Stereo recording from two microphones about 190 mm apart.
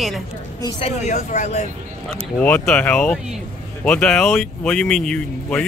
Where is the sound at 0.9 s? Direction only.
40° left (ahead or behind).